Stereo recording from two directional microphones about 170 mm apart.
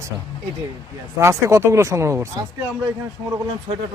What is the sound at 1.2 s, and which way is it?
Speech, 15° right (ahead or behind).